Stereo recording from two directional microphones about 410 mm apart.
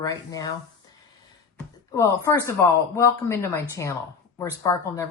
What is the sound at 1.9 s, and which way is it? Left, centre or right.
Speech, centre.